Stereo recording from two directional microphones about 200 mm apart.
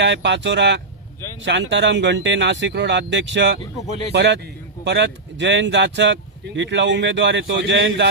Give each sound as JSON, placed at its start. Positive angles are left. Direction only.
{"t": 0.0, "sound": "speech", "side_deg": -60}